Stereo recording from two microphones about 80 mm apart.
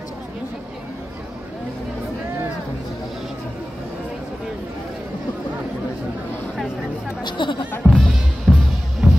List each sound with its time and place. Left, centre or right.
7.2 s speech: left
7.8 s music: right
8.5 s music: centre